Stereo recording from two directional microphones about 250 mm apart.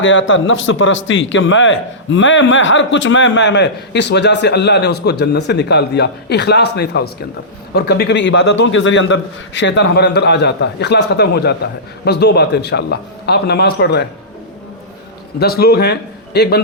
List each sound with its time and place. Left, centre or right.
0.0 s a man's voice: left
15.4 s a man's voice: left